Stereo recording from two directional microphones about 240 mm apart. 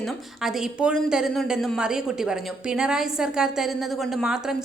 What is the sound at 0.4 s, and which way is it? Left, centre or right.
A woman's voice, centre.